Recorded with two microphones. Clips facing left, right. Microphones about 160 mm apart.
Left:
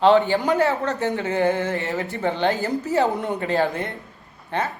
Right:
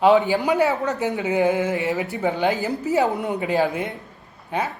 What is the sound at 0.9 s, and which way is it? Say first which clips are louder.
Speech: right 1 dB; 15° right (ahead or behind).